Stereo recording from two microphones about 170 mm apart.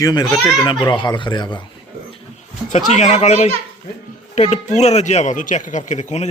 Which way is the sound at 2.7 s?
45° left (ahead or behind).